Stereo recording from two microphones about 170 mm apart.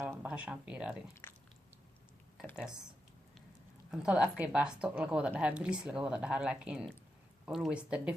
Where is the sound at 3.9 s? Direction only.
5° right (ahead or behind).